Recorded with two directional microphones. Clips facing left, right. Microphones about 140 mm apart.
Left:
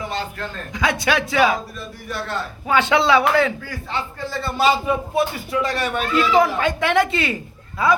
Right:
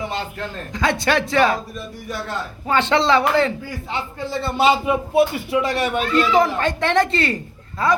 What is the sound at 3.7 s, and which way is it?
A man's voice, 20° right (ahead or behind).